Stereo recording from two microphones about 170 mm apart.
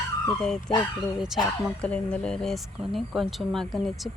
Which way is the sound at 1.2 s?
Centre (ahead or behind).